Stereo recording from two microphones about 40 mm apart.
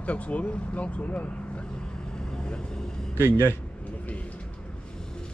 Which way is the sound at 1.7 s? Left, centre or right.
Left.